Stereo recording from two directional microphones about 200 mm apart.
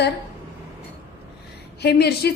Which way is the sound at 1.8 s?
55° left (ahead or behind).